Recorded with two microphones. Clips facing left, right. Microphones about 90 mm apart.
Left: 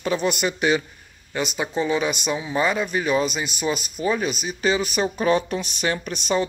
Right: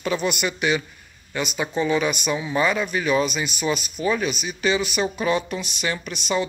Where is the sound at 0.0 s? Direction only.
35° left (ahead or behind).